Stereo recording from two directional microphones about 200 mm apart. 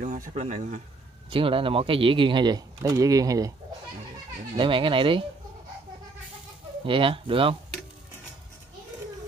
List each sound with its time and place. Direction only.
0.0 s speech: 40° right (ahead or behind); by 3.5 s 15° right (ahead or behind)
4.6 s speech: 25° right (ahead or behind)
6.8 s speech: 25° right (ahead or behind)